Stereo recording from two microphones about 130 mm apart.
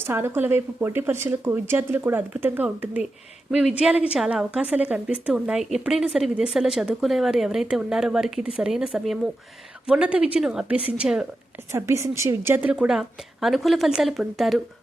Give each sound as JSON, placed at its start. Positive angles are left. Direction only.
{"t": 0.0, "sound": "a woman's voice", "side_deg": -15}
{"t": 11.7, "sound": "a woman's voice", "side_deg": -25}